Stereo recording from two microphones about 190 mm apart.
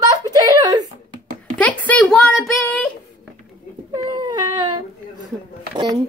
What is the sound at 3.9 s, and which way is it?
Baby cry, 25° right (ahead or behind).